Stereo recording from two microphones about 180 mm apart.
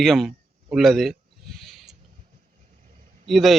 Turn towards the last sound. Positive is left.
turn(degrees=0)  # may be behind; listen again after turning